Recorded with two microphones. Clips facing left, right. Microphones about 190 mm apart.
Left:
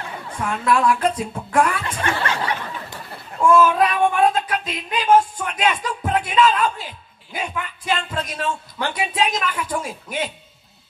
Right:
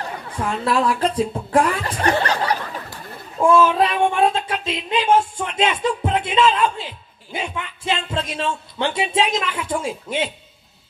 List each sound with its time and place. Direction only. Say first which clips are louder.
0.7 s speech: left 2 dB; 35° right (ahead or behind)